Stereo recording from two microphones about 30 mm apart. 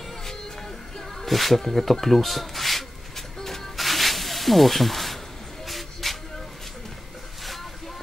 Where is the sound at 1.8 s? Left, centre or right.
Centre.